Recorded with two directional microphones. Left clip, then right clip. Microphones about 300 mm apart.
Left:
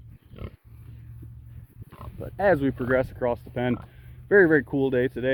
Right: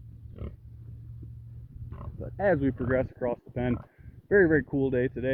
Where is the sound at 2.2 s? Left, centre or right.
Centre.